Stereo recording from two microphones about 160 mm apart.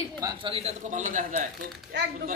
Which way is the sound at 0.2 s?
30° right (ahead or behind).